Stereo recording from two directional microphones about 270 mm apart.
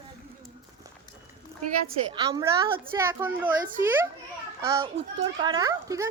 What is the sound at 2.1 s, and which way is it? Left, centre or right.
A woman's voice, centre.